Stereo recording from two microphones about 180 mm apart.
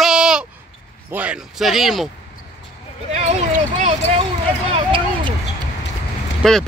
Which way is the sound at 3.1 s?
35° right (ahead or behind).